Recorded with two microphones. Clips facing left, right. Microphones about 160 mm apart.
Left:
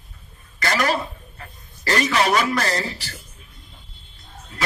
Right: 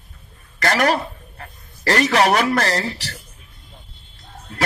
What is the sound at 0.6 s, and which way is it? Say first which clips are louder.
A man's voice: right 4 dB; 60° right (ahead or behind).